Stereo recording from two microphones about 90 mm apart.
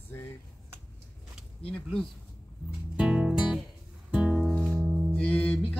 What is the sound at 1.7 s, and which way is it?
Speech, 5° left (ahead or behind).